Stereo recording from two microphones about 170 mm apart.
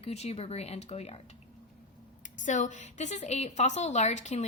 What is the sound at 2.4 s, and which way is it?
A woman's voice, 45° left (ahead or behind).